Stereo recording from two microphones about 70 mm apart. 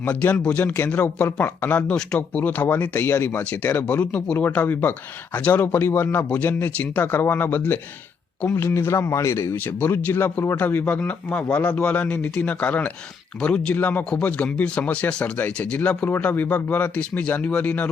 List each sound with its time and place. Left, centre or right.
0.0 s a man's voice: left
9.0 s speech: left
10.4 s speech: left
10.7 s a man's voice: left